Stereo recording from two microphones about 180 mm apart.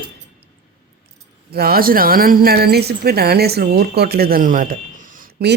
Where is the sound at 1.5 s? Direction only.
60° right (ahead or behind).